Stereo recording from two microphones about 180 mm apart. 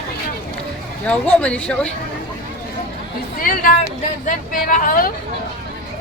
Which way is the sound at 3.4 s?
50° left (ahead or behind).